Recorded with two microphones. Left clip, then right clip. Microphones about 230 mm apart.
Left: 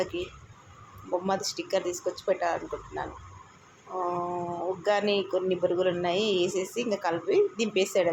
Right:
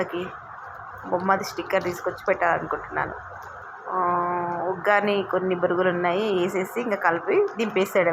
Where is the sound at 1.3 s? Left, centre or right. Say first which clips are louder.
Right 6 dB; centre.